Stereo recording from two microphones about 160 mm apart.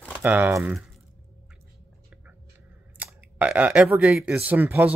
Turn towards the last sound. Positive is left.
turn(degrees=-10)  # may be behind; listen again after turning